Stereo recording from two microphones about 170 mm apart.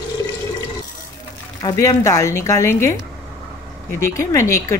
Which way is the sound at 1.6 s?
20° left (ahead or behind).